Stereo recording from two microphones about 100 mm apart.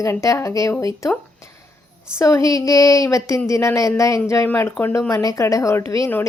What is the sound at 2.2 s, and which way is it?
A woman's voice, 30° left (ahead or behind).